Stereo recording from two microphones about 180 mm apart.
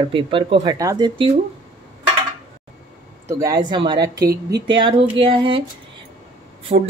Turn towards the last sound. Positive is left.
turn(degrees=-35)  # may be behind; listen again after turning